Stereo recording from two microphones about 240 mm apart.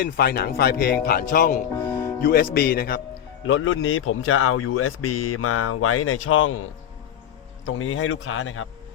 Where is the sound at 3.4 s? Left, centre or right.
Left.